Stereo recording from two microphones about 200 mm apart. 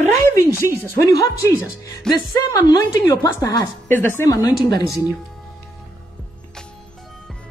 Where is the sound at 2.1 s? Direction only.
5° left (ahead or behind).